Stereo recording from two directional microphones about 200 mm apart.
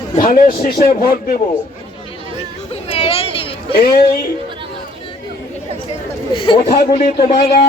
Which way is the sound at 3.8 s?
50° left (ahead or behind).